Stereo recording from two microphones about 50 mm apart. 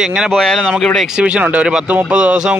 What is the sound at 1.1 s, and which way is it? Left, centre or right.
Speech, right.